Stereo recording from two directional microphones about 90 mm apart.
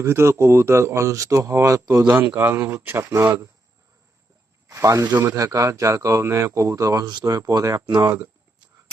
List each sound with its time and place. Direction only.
0.0 s speech: 30° right (ahead or behind)
2.3 s speech: 25° right (ahead or behind)
4.7 s speech: 35° right (ahead or behind)
5.1 s speech: 25° right (ahead or behind)
5.4 s speech: 35° right (ahead or behind)
8.0 s speech: 25° right (ahead or behind)